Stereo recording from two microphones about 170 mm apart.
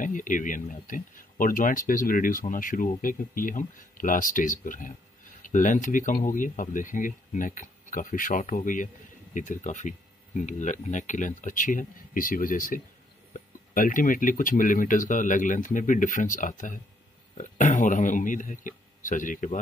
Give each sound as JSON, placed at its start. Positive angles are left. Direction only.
{"t": 0.0, "sound": "speech", "side_deg": 50}